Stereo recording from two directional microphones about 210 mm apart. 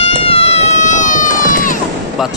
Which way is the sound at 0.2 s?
30° left (ahead or behind).